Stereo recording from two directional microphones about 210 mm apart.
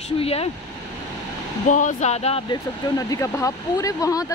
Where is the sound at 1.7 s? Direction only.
35° left (ahead or behind).